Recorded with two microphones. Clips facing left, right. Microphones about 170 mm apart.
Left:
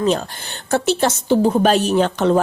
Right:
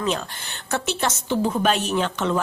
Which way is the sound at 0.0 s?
35° left (ahead or behind).